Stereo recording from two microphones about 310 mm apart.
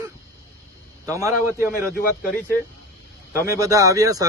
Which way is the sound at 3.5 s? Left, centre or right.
Centre.